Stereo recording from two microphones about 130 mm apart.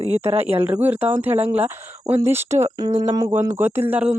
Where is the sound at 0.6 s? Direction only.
15° right (ahead or behind).